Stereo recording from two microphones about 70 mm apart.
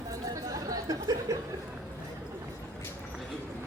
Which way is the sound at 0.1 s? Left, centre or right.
Right.